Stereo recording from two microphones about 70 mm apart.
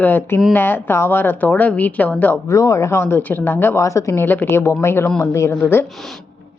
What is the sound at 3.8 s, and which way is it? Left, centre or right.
Speech, left.